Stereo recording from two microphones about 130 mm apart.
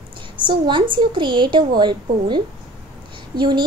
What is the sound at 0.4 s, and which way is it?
A woman's voice, 40° right (ahead or behind).